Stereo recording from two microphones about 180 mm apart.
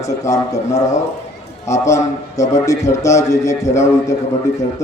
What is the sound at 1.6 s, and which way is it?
A man's voice, 15° left (ahead or behind).